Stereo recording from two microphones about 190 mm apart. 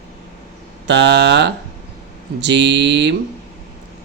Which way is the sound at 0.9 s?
65° right (ahead or behind).